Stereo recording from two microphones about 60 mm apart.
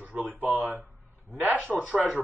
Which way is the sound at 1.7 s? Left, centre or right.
Centre.